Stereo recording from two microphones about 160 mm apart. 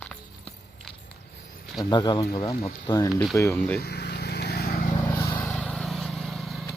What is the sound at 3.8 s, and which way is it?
Vehicle, 90° left.